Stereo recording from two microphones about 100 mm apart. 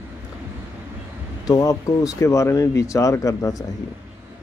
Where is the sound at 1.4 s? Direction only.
35° left (ahead or behind).